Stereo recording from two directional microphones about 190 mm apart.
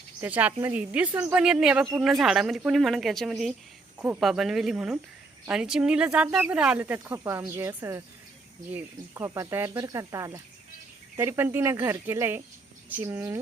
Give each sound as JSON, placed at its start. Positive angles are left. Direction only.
{"t": 0.2, "sound": "a woman's voice", "side_deg": -10}